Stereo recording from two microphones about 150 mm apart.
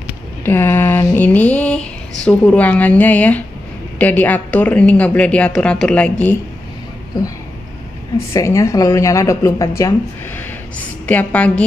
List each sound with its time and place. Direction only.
0.5 s a woman's voice: 15° left (ahead or behind)
7.2 s speech: 25° left (ahead or behind)
11.1 s a woman's voice: 10° left (ahead or behind)